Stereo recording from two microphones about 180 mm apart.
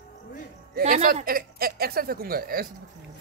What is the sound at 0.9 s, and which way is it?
Speech, 45° right (ahead or behind).